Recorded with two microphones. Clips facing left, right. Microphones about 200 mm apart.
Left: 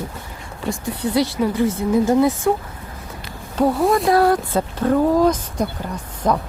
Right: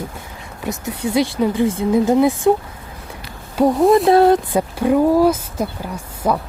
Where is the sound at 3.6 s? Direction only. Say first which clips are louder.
Right 3 dB; 15° right (ahead or behind).